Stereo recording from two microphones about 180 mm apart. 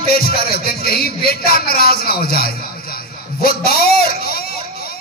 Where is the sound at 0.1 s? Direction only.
55° left (ahead or behind).